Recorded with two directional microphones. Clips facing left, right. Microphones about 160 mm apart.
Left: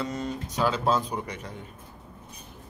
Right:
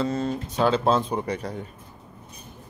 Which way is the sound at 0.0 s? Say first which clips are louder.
Right 6 dB; 30° right (ahead or behind).